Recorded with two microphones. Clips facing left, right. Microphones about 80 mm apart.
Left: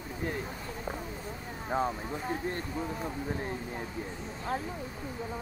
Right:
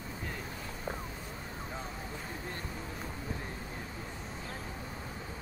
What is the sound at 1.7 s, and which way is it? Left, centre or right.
Speech, left.